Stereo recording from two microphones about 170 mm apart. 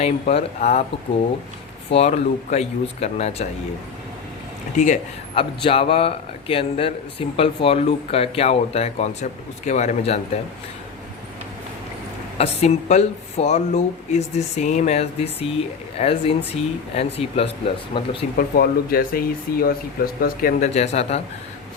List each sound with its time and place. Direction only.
0.0 s speech: 40° left (ahead or behind)
1.9 s speech: 40° left (ahead or behind)
4.8 s speech: 40° left (ahead or behind)
12.4 s speech: 40° left (ahead or behind)
18.3 s speech: 60° left (ahead or behind)
20.7 s speech: 40° left (ahead or behind)